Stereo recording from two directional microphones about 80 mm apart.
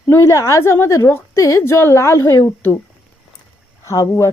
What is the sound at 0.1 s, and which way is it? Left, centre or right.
A woman's voice, left.